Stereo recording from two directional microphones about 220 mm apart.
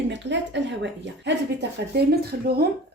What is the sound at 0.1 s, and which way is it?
A woman's voice, 55° right (ahead or behind).